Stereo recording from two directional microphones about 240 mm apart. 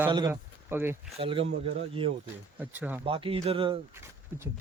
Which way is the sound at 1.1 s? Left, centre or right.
Right.